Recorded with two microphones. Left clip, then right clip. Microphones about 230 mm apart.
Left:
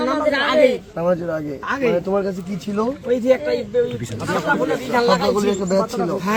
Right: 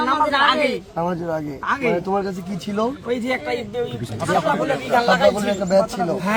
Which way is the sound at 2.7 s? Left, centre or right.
Centre.